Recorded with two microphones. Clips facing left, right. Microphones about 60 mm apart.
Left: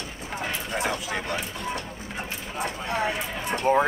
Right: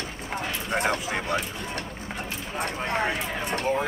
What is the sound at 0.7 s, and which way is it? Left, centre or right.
Speech, right.